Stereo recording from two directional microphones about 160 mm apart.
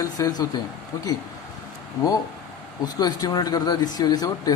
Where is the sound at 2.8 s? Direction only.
25° left (ahead or behind).